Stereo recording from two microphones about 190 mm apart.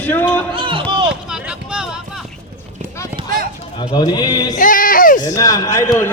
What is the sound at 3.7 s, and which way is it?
Speech, 20° left (ahead or behind).